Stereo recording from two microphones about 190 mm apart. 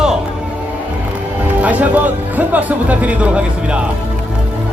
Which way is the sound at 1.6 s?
10° right (ahead or behind).